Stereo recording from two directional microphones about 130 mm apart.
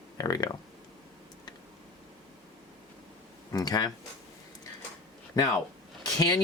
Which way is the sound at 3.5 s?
30° left (ahead or behind).